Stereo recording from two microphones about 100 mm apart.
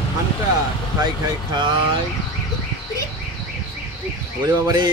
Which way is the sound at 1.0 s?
50° right (ahead or behind).